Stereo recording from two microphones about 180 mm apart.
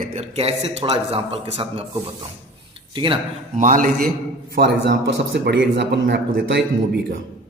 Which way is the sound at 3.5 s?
45° right (ahead or behind).